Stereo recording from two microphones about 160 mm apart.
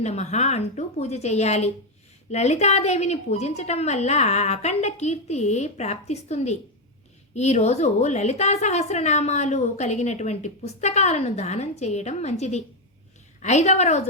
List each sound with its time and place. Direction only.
0.0 s a woman's voice: 45° left (ahead or behind)